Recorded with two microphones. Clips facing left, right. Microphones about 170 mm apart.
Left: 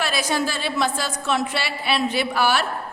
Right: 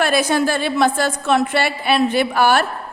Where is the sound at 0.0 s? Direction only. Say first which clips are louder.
Right 7 dB; 55° right (ahead or behind).